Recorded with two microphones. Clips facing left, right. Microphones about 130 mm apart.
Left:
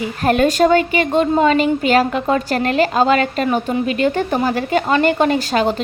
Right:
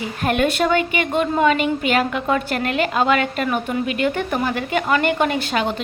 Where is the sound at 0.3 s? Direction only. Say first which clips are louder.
Left 5 dB; 35° left (ahead or behind).